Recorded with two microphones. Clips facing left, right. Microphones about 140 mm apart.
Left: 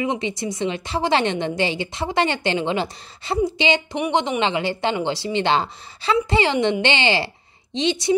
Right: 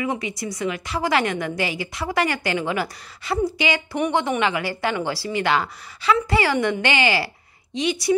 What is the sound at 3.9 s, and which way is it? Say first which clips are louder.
A woman's voice: even; 15° left (ahead or behind).